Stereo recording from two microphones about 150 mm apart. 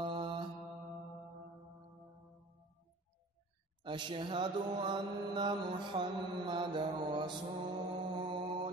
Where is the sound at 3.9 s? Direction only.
35° right (ahead or behind).